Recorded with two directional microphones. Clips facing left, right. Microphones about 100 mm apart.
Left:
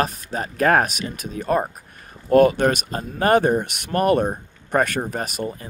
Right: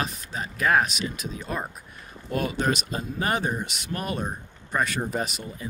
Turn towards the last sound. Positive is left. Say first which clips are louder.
# left 4 dB
turn(degrees=50)  # may be behind; listen again after turning